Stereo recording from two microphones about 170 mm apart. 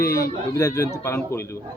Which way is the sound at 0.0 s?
15° left (ahead or behind).